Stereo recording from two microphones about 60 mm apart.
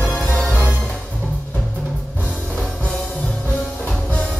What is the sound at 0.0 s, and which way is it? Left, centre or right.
Music, left.